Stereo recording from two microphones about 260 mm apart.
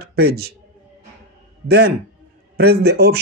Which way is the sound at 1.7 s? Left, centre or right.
Right.